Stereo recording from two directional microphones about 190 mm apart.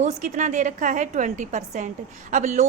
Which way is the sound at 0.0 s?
40° right (ahead or behind).